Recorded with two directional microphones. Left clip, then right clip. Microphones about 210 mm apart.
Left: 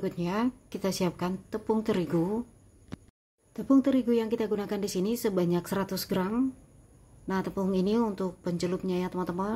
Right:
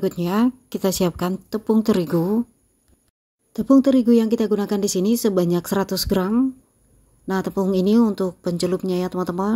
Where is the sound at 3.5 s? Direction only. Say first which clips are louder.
Right 9 dB; 35° right (ahead or behind).